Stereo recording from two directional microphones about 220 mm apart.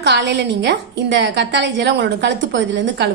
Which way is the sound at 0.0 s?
50° right (ahead or behind).